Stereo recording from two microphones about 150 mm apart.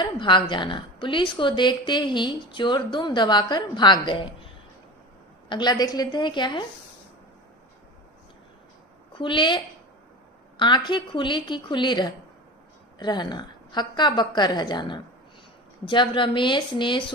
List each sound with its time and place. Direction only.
0.0 s a woman's voice: 30° left (ahead or behind)
5.5 s a woman's voice: 30° left (ahead or behind)
9.1 s a woman's voice: 35° left (ahead or behind)
10.6 s a woman's voice: 30° left (ahead or behind)